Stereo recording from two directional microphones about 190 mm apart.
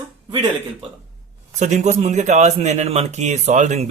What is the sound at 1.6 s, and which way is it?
Speech, 35° right (ahead or behind).